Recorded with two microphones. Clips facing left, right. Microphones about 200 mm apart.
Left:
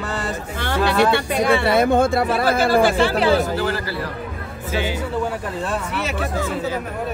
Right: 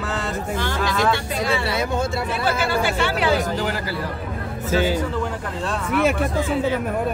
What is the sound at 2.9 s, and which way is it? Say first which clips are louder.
Speech: left 4 dB; 35° left (ahead or behind).